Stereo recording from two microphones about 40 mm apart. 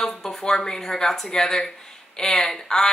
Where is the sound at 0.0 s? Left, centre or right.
Centre.